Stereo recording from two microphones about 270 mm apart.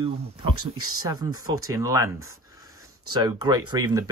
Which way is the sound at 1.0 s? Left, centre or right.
Centre.